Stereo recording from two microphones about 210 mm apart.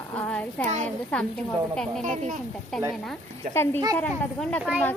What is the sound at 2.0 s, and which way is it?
Speech, 35° right (ahead or behind).